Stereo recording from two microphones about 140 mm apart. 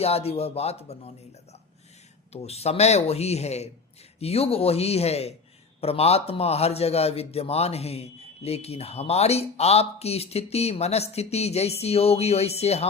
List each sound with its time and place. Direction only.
0.0 s a man's voice: 45° left (ahead or behind)
2.3 s a man's voice: 50° left (ahead or behind)